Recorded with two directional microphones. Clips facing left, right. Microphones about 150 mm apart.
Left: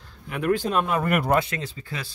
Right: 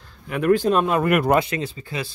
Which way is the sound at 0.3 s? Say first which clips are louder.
Right 5 dB; 60° right (ahead or behind).